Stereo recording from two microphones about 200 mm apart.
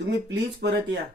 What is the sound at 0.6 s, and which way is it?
Speech, 60° right (ahead or behind).